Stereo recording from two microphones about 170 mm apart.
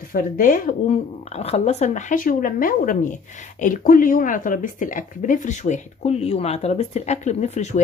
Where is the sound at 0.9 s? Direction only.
35° left (ahead or behind).